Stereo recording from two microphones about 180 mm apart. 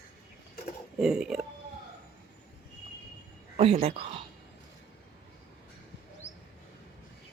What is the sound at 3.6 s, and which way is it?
Speech, 35° right (ahead or behind).